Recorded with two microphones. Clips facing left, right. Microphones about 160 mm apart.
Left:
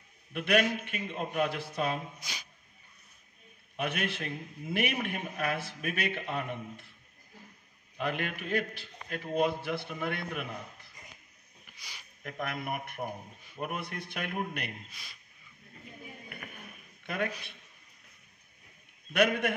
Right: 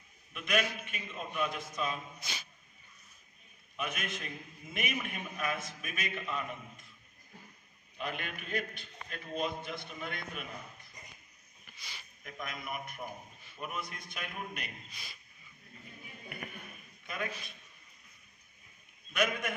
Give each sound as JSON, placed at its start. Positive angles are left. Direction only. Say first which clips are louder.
{"t": 0.3, "sound": "a man's voice", "louder": "left 6 dB", "side_deg": 65}
{"t": 2.1, "sound": "speech", "louder": "even", "side_deg": 15}
{"t": 3.7, "sound": "a man's voice", "louder": "left 5 dB", "side_deg": 70}
{"t": 8.0, "sound": "a man's voice", "louder": "left 6 dB", "side_deg": 70}
{"t": 12.2, "sound": "a man's voice", "louder": "left 7 dB", "side_deg": 65}
{"t": 14.9, "sound": "speech", "louder": "right 1 dB", "side_deg": 0}
{"t": 17.0, "sound": "a man's voice", "louder": "left 6 dB", "side_deg": 70}
{"t": 19.1, "sound": "a man's voice", "louder": "left 6 dB", "side_deg": 65}